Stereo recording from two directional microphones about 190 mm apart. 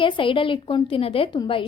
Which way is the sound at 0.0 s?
25° left (ahead or behind).